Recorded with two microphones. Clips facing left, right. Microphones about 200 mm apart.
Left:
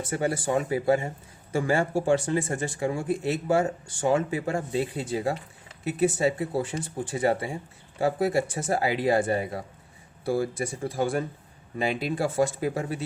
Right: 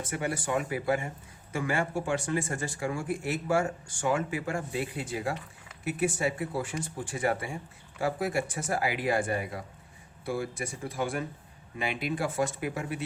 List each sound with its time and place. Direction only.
0.0 s speech: 35° left (ahead or behind)